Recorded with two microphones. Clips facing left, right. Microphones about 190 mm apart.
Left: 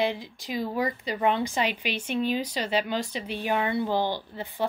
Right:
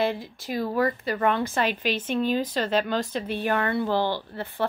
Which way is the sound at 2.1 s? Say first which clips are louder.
Right 1 dB; 45° right (ahead or behind).